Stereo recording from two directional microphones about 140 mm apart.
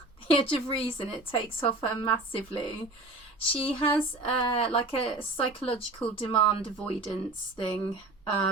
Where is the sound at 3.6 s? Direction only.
40° left (ahead or behind).